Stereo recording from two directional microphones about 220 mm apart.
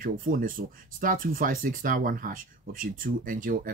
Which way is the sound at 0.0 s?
40° right (ahead or behind).